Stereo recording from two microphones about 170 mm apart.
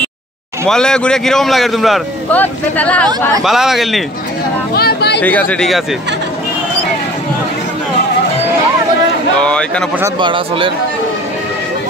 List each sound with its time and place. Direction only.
0.7 s a man's voice: 5° left (ahead or behind)
3.4 s a man's voice: centre (ahead or behind)
4.7 s speech: 70° left (ahead or behind)
5.2 s speech: 10° left (ahead or behind)
9.4 s a man's voice: 5° left (ahead or behind)
10.1 s speech: 30° right (ahead or behind)